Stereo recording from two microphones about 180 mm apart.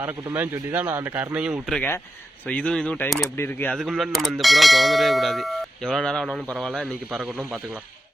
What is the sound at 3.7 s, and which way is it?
Speech, centre (ahead or behind).